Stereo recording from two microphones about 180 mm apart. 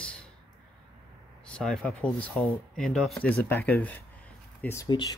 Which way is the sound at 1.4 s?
5° left (ahead or behind).